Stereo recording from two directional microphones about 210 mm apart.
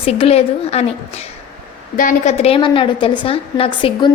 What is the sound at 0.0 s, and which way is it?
Speech, 30° left (ahead or behind).